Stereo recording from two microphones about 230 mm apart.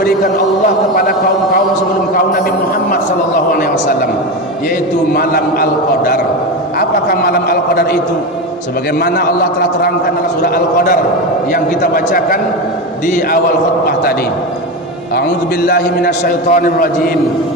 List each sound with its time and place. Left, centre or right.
5.1 s a man's voice: left
6.7 s a man's voice: left
9.0 s a man's voice: left
10.4 s a man's voice: left
15.6 s a man's voice: left